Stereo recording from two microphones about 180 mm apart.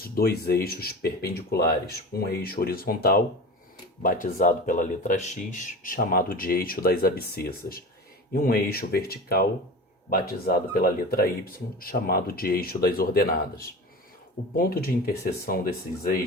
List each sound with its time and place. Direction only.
0.0 s speech: 60° left (ahead or behind)
14.5 s speech: 55° left (ahead or behind)